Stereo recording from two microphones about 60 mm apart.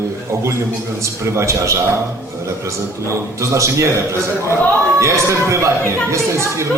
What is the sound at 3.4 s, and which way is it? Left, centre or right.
A man's voice, right.